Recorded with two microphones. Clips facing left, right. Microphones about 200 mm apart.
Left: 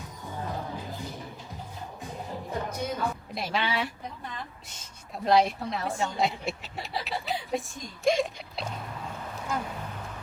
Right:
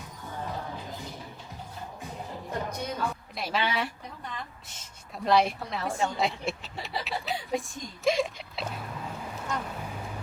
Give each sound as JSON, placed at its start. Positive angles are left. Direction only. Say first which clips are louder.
{"t": 2.5, "sound": "a woman's voice", "louder": "left 1 dB", "side_deg": 5}
{"t": 5.1, "sound": "a sound", "louder": "left 1 dB", "side_deg": 0}
{"t": 9.8, "sound": "vehicle", "louder": "right 1 dB", "side_deg": -10}